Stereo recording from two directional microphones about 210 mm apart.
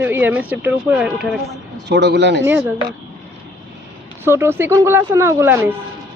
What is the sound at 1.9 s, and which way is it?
Speech, 55° right (ahead or behind).